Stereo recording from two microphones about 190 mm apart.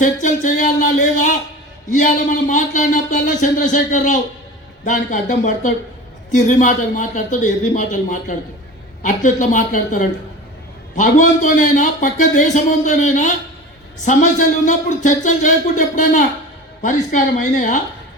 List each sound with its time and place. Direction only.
0.0 s speech: 40° left (ahead or behind)